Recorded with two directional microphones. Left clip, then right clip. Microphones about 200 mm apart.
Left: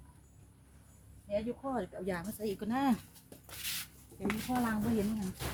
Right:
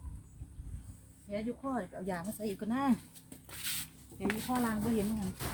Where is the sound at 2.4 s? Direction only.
40° left (ahead or behind).